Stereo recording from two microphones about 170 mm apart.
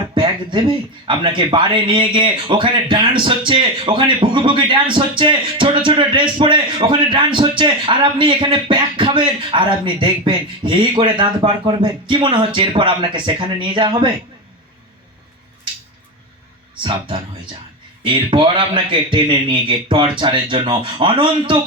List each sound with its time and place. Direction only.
0.1 s speech: 30° right (ahead or behind)
16.8 s speech: 30° right (ahead or behind)